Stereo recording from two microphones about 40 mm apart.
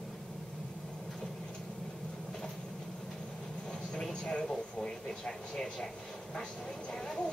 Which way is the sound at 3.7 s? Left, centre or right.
Centre.